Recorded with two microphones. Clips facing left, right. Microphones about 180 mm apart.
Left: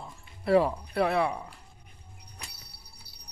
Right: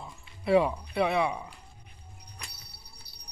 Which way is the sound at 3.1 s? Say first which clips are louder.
Even; 10° left (ahead or behind).